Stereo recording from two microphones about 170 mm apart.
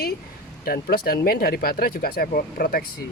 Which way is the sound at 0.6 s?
60° left (ahead or behind).